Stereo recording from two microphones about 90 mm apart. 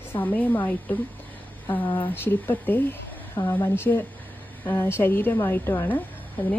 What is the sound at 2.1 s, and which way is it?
A woman's voice, 25° left (ahead or behind).